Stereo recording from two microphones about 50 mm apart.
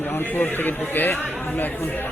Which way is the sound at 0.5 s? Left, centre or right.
Left.